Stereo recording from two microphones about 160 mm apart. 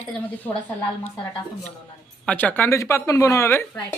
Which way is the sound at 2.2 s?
10° left (ahead or behind).